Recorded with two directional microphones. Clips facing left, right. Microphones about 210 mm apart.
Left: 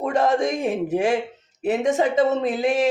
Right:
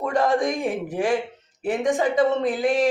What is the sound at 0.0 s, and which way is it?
Speech, 20° left (ahead or behind).